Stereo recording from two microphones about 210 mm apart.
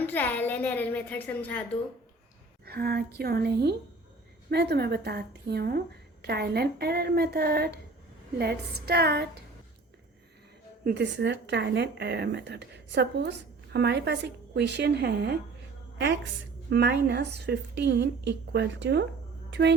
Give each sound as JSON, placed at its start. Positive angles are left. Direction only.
{"t": 0.0, "sound": "a woman's voice", "side_deg": 10}
{"t": 2.6, "sound": "speech", "side_deg": -50}
{"t": 10.8, "sound": "speech", "side_deg": -55}
{"t": 16.6, "sound": "speech", "side_deg": -50}
{"t": 19.5, "sound": "a sound", "side_deg": -55}